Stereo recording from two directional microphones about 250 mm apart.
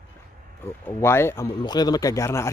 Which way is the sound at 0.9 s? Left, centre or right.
Centre.